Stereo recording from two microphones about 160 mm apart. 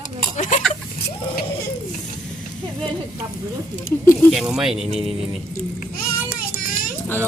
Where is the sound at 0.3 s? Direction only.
50° left (ahead or behind).